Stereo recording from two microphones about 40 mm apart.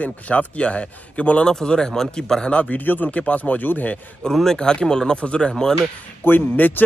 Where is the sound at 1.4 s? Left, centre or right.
Centre.